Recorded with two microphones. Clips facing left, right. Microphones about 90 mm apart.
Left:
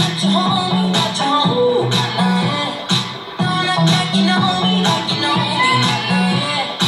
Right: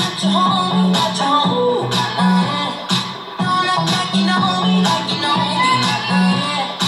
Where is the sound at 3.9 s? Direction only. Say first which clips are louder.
Left 1 dB; 20° right (ahead or behind).